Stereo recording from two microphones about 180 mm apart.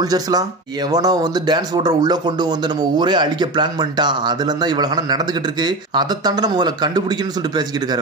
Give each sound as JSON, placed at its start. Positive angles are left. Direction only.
{"t": 0.0, "sound": "speech", "side_deg": -20}